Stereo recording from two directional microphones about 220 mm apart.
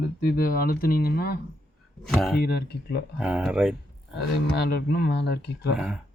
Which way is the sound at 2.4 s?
45° left (ahead or behind).